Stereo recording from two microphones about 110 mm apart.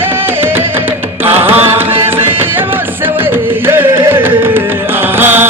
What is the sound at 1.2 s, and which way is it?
Music, 20° right (ahead or behind).